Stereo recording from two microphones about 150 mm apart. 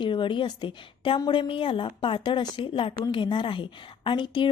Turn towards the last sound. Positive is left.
turn(degrees=30)  # may be behind; listen again after turning